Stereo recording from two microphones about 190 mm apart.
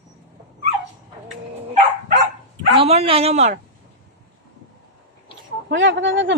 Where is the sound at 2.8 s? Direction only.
30° right (ahead or behind).